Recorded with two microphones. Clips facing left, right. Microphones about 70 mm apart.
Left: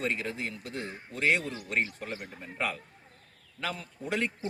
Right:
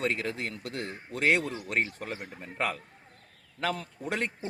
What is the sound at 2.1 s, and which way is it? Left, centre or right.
Speech, right.